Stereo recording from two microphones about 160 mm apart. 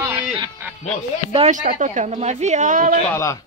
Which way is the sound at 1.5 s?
50° right (ahead or behind).